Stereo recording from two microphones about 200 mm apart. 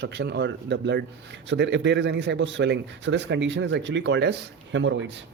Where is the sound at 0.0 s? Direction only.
60° right (ahead or behind).